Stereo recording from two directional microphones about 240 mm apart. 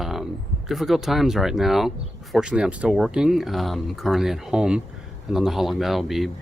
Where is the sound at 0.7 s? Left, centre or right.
Centre.